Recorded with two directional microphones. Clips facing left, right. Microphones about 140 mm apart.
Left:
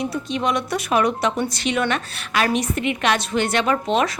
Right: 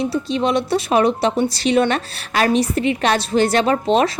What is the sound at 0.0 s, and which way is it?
A woman's voice, 30° right (ahead or behind).